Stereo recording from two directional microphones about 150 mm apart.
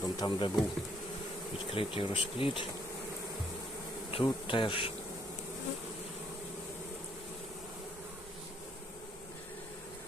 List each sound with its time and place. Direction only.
0.0 s speech: 30° left (ahead or behind)
1.7 s bee: 35° left (ahead or behind)
4.1 s bee: 35° left (ahead or behind)